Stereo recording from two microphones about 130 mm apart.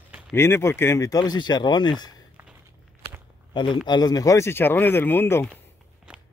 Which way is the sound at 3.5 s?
40° left (ahead or behind).